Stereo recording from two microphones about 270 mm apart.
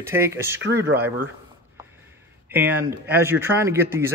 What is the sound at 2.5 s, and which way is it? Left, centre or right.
A man's voice, centre.